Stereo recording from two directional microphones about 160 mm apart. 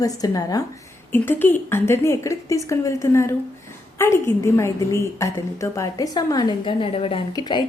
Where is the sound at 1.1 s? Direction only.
15° left (ahead or behind); by 7.2 s 35° left (ahead or behind).